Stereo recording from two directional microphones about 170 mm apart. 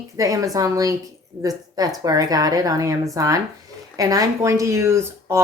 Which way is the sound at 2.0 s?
20° right (ahead or behind).